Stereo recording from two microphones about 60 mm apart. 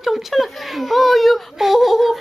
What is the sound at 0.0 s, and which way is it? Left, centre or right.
Whimper, centre.